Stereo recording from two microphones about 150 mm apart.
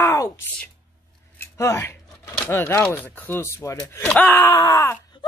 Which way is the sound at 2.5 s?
15° left (ahead or behind).